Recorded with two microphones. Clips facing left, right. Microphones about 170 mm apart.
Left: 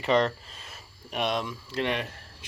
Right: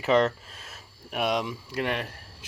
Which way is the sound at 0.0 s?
5° right (ahead or behind).